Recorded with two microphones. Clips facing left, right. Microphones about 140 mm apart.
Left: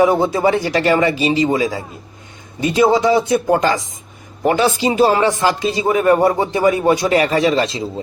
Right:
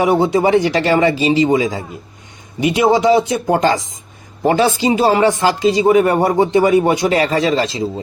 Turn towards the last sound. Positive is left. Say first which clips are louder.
# even
turn(degrees=-30)  # may be behind; listen again after turning